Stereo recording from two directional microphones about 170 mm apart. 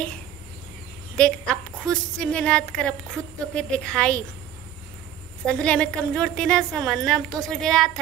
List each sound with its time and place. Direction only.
1.1 s a woman's voice: 5° left (ahead or behind)
5.5 s a woman's voice: 5° left (ahead or behind)